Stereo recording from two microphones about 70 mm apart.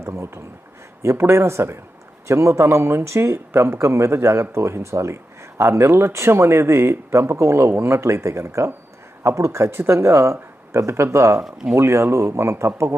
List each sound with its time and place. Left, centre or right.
0.0 s speech: right